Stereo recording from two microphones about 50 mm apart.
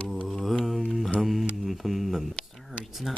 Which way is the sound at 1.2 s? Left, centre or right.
Centre.